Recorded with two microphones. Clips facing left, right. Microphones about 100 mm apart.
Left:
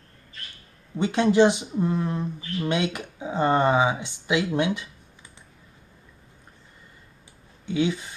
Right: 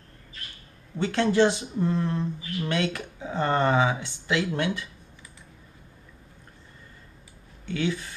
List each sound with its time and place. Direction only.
0.9 s speech: 15° left (ahead or behind)
7.6 s speech: 15° left (ahead or behind)